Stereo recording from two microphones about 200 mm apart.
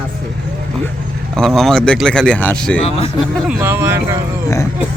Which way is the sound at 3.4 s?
5° right (ahead or behind).